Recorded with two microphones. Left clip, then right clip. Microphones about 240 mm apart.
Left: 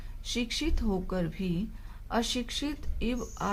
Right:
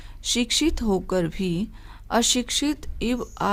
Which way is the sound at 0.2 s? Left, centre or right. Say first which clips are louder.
Right 10 dB; right.